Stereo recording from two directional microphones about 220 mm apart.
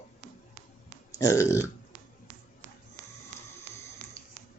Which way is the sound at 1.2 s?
15° left (ahead or behind).